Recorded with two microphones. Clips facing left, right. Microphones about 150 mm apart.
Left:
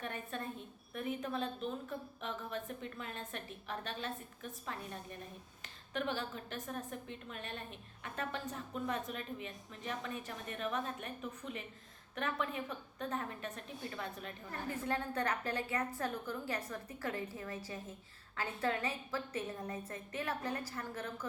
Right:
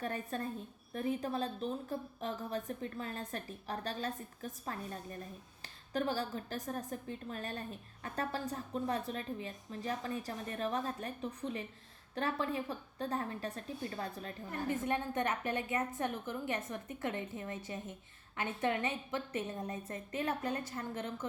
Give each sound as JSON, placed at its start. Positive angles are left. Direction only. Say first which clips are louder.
{"t": 0.0, "sound": "a woman's voice", "louder": "right 4 dB", "side_deg": -35}
{"t": 14.7, "sound": "a woman's voice", "louder": "right 2 dB", "side_deg": -20}